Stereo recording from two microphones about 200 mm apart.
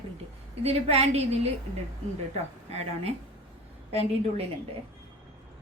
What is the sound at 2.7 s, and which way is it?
Speech, 30° right (ahead or behind).